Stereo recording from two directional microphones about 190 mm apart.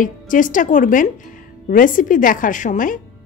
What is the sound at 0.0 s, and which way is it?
Speech, 45° left (ahead or behind).